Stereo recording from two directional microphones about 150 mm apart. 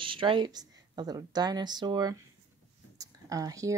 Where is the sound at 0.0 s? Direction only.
35° right (ahead or behind).